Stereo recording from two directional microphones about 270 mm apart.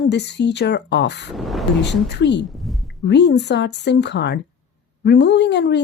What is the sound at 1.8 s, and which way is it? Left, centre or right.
Speech, left.